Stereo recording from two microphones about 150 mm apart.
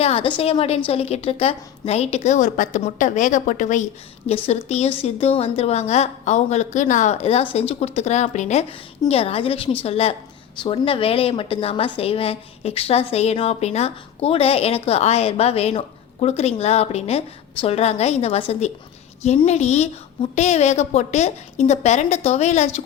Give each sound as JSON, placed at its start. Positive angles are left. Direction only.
{"t": 0.0, "sound": "a woman's voice", "side_deg": 40}
{"t": 4.4, "sound": "a woman's voice", "side_deg": 45}